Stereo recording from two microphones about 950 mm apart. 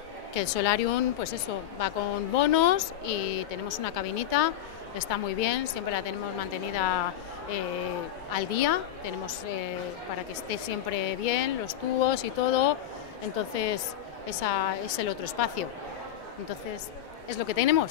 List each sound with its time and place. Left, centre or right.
0.3 s a woman's voice: left
8.3 s a woman's voice: left
10.5 s speech: left
17.5 s a woman's voice: left